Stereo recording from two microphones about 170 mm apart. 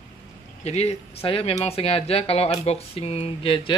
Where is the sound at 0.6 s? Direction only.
40° left (ahead or behind).